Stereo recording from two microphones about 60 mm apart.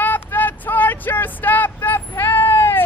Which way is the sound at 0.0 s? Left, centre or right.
Left.